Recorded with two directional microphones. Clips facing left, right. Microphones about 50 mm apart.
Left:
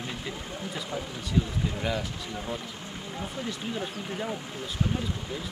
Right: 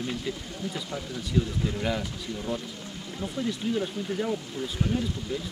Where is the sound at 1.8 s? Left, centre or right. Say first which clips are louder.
Right 1 dB; centre.